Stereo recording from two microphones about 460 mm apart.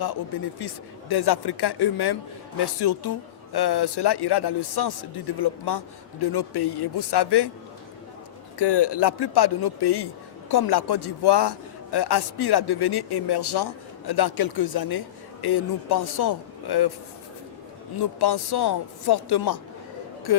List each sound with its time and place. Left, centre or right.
0.6 s a man's voice: left
8.5 s a man's voice: left
18.2 s a man's voice: left